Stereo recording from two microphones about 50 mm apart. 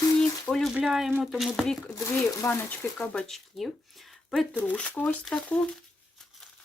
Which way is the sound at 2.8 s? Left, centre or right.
Left.